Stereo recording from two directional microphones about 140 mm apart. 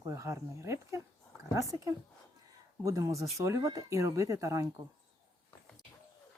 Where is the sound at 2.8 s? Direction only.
25° right (ahead or behind).